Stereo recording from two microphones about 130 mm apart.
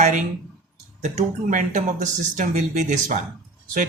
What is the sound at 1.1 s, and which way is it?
Speech, 80° right.